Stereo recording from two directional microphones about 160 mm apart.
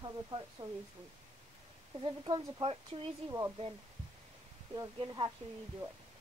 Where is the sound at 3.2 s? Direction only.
20° right (ahead or behind).